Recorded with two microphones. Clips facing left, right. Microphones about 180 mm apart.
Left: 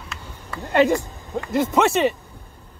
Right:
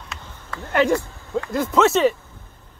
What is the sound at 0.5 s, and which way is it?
Speech, 15° left (ahead or behind).